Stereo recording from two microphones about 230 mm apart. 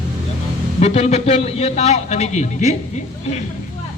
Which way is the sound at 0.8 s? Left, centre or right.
Left.